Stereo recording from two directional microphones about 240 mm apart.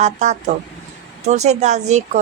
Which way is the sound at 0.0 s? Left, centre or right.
Right.